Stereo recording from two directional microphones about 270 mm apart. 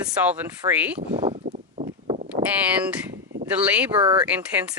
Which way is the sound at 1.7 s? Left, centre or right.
Right.